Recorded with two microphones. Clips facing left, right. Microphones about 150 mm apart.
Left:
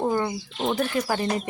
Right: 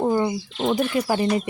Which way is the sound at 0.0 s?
10° right (ahead or behind).